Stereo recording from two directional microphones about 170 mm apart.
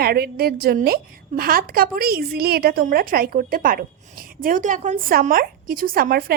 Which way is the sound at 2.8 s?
55° right (ahead or behind).